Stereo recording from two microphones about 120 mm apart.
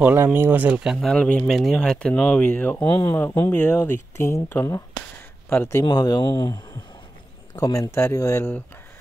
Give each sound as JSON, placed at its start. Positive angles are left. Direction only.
{"t": 0.0, "sound": "speech", "side_deg": -15}
{"t": 1.0, "sound": "speech", "side_deg": 10}
{"t": 2.8, "sound": "speech", "side_deg": 40}
{"t": 3.1, "sound": "speech", "side_deg": 20}
{"t": 5.9, "sound": "speech", "side_deg": 35}
{"t": 7.6, "sound": "speech", "side_deg": 30}